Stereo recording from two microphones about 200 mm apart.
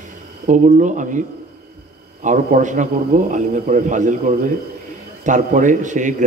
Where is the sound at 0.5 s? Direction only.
40° right (ahead or behind).